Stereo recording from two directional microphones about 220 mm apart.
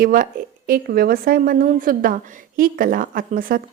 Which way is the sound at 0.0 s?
40° right (ahead or behind).